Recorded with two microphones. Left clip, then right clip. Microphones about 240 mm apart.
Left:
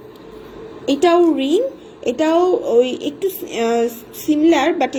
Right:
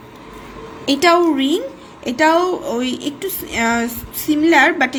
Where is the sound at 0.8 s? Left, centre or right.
Right.